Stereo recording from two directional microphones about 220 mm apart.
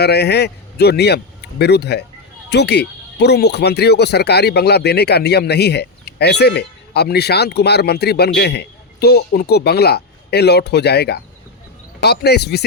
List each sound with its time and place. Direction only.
0.0 s a man's voice: 50° left (ahead or behind)